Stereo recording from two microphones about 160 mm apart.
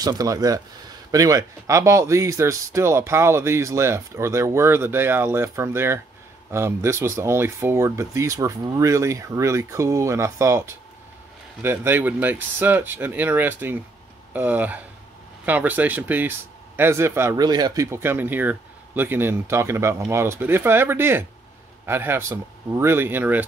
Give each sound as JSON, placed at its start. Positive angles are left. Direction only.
{"t": 0.0, "sound": "speech", "side_deg": -20}